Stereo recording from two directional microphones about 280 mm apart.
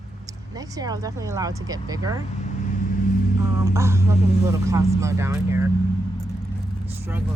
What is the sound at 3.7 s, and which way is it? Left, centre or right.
Speech, centre.